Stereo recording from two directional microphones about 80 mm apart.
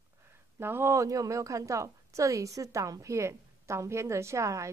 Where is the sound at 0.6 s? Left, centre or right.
Right.